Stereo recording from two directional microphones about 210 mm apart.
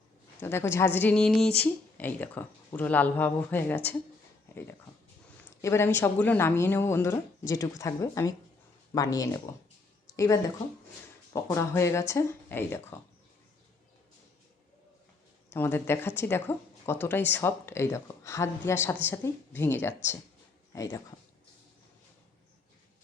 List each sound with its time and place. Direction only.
0.3 s speech: 10° left (ahead or behind)
5.6 s speech: 10° left (ahead or behind)
15.4 s speech: 10° left (ahead or behind)